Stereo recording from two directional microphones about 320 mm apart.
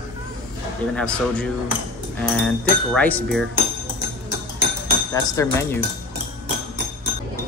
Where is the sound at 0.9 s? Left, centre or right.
Centre.